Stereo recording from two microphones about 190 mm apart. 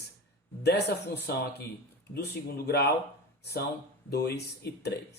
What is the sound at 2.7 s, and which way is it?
Speech, 60° left (ahead or behind).